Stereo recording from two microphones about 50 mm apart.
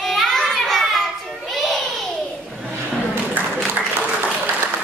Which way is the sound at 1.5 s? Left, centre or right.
Centre.